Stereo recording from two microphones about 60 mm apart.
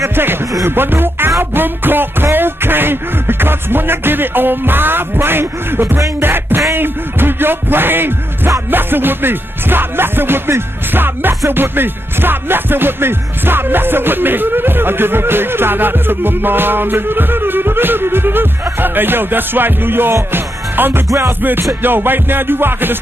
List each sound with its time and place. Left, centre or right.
0.1 s music: right
20.3 s speech: right
21.4 s music: right